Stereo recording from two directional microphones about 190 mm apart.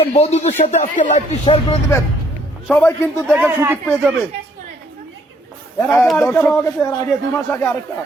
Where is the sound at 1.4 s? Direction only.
30° left (ahead or behind).